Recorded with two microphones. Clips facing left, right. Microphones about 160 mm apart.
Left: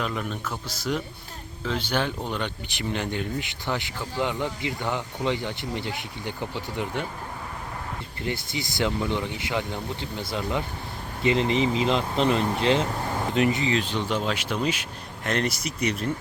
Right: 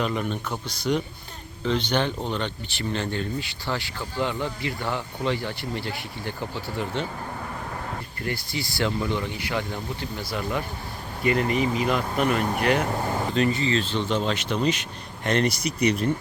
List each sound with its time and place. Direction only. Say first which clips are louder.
0.0 s a man's voice: right 3 dB; centre (ahead or behind); by 6.3 s 20° left (ahead or behind)
8.2 s speech: left 1 dB; 20° left (ahead or behind); by 16.1 s centre (ahead or behind)